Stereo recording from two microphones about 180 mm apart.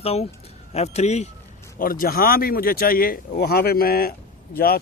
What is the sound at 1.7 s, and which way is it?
Speech, 50° left (ahead or behind).